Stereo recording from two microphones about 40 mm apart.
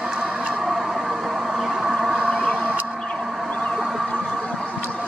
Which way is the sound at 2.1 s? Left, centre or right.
Right.